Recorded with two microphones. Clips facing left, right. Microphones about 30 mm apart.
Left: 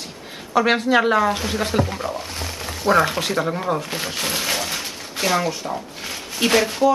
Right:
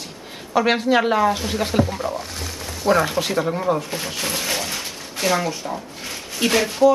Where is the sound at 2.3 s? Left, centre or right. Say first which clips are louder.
Left 2 dB; left.